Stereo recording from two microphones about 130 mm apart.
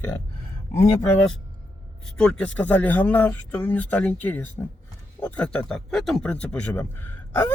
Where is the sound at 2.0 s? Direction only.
5° left (ahead or behind).